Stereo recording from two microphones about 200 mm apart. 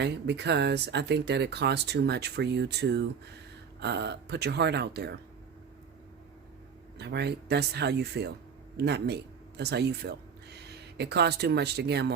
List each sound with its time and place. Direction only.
0.0 s speech: 60° right (ahead or behind)
7.0 s speech: 55° right (ahead or behind)